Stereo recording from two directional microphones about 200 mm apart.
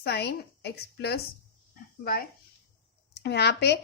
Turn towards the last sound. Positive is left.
turn(degrees=55)  # may be behind; listen again after turning